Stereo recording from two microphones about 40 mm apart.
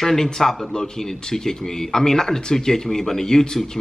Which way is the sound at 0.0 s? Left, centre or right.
Centre.